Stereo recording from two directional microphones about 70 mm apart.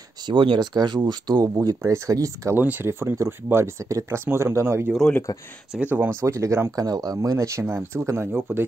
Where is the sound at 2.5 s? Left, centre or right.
Right.